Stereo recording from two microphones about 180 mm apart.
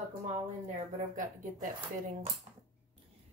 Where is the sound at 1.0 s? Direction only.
45° right (ahead or behind).